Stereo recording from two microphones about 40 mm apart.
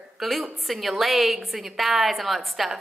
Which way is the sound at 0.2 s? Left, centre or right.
Centre.